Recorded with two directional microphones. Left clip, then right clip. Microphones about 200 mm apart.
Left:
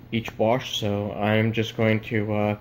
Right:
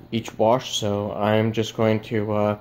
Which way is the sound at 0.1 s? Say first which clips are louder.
Right 3 dB; 15° right (ahead or behind).